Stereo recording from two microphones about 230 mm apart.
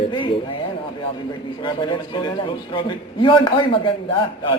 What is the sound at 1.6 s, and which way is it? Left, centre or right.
A man's voice, left.